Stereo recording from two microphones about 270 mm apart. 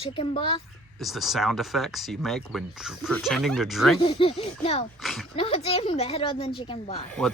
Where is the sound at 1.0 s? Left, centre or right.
Centre.